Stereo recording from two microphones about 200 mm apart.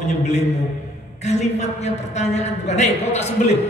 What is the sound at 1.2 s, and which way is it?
A woman's voice, 35° left (ahead or behind).